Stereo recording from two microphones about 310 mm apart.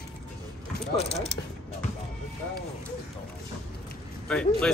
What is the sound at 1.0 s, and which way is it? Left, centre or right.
Speech, centre.